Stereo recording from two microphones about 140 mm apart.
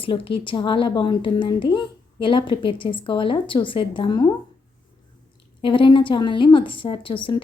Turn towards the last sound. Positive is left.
turn(degrees=35)  # may be behind; listen again after turning